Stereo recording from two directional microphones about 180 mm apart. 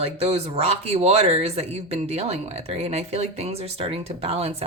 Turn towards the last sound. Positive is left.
turn(degrees=-35)  # may be behind; listen again after turning